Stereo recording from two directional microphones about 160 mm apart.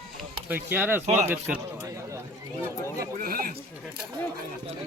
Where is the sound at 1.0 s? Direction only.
45° right (ahead or behind).